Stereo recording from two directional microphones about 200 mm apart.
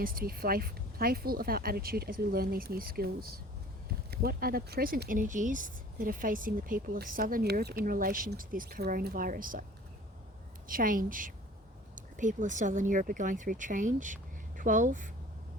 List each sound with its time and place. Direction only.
0.0 s speech: 45° right (ahead or behind)
10.7 s speech: 45° right (ahead or behind)